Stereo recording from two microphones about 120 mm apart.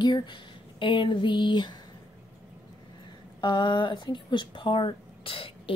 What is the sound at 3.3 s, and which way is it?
Speech, 40° left (ahead or behind).